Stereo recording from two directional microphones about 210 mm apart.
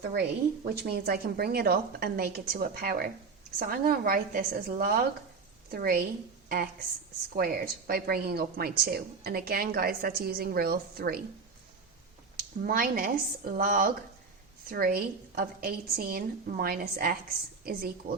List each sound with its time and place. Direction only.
0.0 s a woman's voice: 50° right (ahead or behind)
7.3 s a woman's voice: 45° right (ahead or behind)
12.6 s a woman's voice: 40° right (ahead or behind)